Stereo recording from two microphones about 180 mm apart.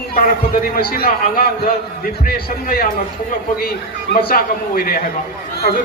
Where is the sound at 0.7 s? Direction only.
55° left (ahead or behind).